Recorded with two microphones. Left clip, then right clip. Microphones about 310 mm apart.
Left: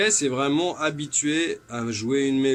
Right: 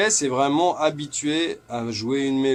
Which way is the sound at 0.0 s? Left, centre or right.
Centre.